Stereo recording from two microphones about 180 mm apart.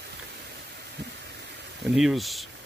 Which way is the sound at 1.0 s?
70° right (ahead or behind).